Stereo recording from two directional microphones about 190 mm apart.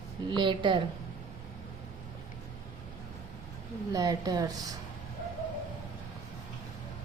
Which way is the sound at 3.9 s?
20° right (ahead or behind).